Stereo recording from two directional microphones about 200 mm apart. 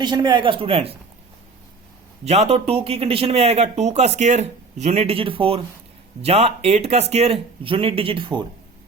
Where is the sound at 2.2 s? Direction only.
30° right (ahead or behind).